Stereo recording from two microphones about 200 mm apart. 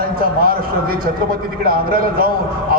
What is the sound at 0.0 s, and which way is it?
A man's voice, 50° right (ahead or behind).